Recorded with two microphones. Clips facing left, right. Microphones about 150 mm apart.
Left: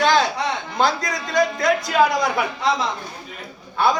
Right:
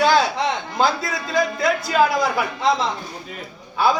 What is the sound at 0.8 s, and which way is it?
A man's voice, 5° right (ahead or behind).